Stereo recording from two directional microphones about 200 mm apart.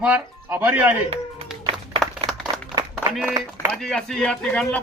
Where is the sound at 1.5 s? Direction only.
Centre (ahead or behind).